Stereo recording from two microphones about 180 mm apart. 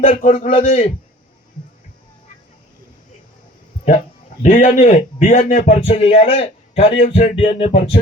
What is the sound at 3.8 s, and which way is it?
A man's voice, 45° left (ahead or behind).